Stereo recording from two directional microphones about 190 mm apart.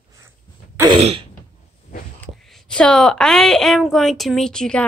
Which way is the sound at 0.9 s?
30° right (ahead or behind).